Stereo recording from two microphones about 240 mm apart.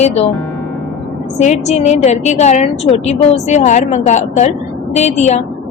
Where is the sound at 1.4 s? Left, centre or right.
Left.